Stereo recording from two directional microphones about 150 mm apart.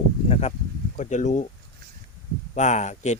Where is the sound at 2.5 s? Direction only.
50° left (ahead or behind).